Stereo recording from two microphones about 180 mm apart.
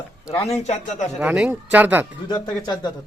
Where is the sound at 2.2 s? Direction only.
25° left (ahead or behind).